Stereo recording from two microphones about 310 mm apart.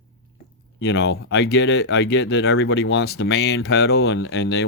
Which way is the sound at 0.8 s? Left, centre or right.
Left.